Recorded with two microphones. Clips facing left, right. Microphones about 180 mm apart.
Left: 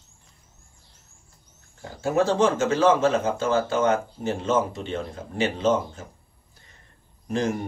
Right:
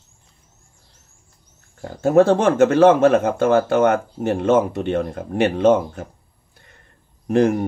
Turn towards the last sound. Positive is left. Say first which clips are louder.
# right 9 dB
turn(degrees=-60)  # may be behind; listen again after turning